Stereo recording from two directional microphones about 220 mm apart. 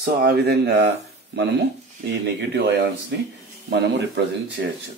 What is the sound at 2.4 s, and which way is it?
Speech, 50° right (ahead or behind).